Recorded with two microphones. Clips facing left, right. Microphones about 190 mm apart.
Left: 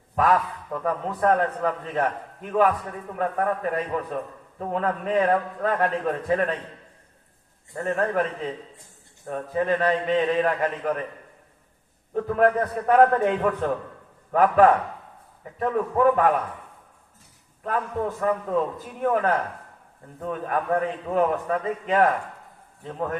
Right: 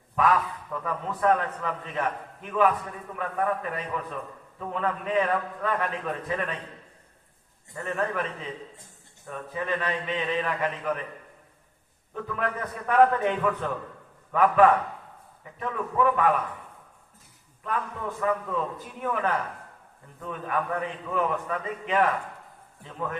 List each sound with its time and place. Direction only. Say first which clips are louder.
0.2 s a man's voice: left 2 dB; 40° left (ahead or behind)
7.7 s a man's voice: left 5 dB; 45° left (ahead or behind)
12.1 s a man's voice: left 10 dB; 40° left (ahead or behind)
17.6 s a man's voice: left 5 dB; 40° left (ahead or behind)